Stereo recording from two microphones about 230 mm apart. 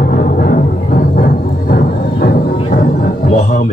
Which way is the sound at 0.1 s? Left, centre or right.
Left.